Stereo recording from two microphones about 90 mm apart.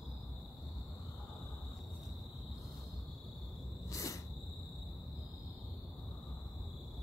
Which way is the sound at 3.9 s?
35° left (ahead or behind).